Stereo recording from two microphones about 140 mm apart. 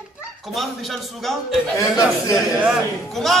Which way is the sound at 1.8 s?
25° left (ahead or behind).